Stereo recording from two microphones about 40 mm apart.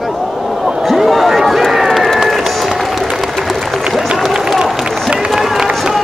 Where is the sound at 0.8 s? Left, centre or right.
Centre.